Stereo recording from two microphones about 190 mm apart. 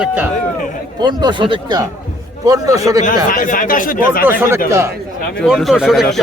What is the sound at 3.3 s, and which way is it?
Speech, 45° left (ahead or behind).